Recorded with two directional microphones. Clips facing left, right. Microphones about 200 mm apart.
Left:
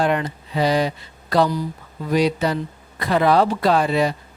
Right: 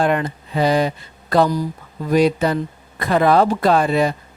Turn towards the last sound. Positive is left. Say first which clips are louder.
# right 2 dB
turn(degrees=-50)  # may be behind; listen again after turning